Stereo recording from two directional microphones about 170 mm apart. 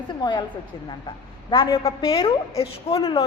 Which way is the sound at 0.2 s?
25° left (ahead or behind).